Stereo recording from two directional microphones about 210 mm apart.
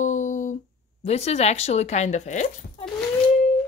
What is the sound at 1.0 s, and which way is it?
Speech, 30° left (ahead or behind).